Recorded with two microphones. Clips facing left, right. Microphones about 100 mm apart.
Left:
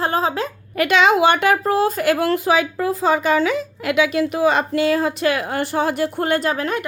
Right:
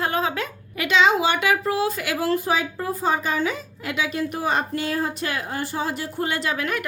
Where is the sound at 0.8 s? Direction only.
55° left (ahead or behind).